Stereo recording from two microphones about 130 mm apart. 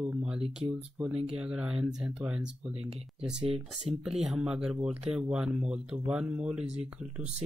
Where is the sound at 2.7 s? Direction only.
50° right (ahead or behind).